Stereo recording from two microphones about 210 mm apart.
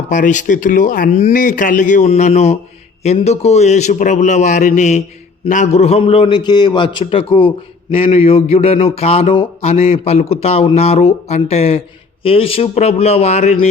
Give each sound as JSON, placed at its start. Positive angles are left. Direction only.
{"t": 0.1, "sound": "speech", "side_deg": 35}